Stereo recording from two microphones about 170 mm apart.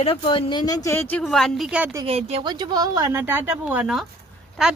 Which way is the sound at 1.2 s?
Centre (ahead or behind).